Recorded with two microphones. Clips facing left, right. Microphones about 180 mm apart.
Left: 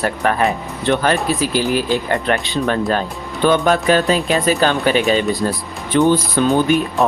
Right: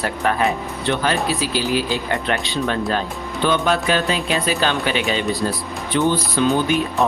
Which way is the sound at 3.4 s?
45° left (ahead or behind).